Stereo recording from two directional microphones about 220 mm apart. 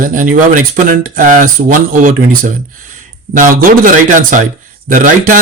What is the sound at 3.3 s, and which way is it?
Speech, 40° right (ahead or behind).